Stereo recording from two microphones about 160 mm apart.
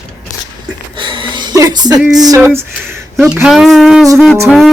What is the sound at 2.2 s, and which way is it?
Music, 20° right (ahead or behind).